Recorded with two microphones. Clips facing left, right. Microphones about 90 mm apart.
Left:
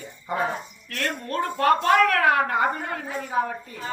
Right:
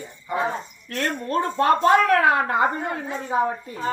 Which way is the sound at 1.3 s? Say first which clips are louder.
Right 1 dB; 30° right (ahead or behind).